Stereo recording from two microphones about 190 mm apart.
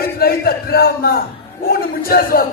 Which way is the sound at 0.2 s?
55° left (ahead or behind).